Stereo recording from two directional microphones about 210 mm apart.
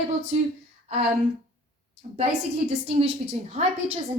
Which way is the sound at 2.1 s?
30° right (ahead or behind).